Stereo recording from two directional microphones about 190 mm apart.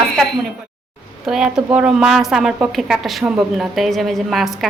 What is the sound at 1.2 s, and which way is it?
A woman's voice, 5° right (ahead or behind).